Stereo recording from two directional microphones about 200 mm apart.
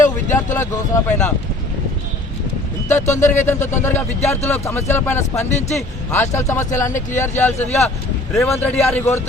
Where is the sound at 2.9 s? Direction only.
10° left (ahead or behind).